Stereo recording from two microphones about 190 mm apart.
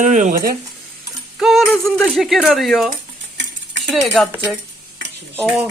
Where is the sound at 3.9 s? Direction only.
Centre (ahead or behind).